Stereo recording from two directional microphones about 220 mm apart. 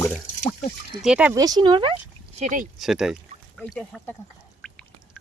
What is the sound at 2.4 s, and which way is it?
Speech, 35° right (ahead or behind).